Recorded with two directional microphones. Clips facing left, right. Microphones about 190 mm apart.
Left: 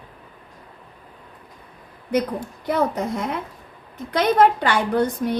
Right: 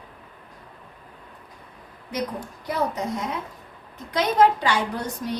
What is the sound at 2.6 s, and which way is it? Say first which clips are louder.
A woman's voice: left 4 dB; 55° left (ahead or behind).